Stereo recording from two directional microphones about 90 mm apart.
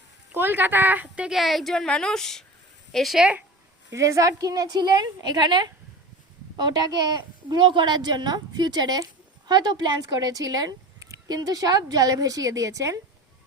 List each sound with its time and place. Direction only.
0.3 s speech: 25° right (ahead or behind)
1.3 s speech: centre (ahead or behind)
3.9 s a woman's voice: 35° right (ahead or behind)